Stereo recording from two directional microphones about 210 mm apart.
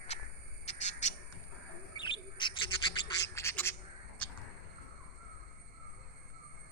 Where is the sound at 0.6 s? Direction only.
35° left (ahead or behind).